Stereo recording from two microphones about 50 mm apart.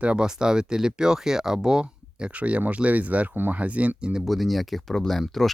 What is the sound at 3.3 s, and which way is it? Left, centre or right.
Speech, right.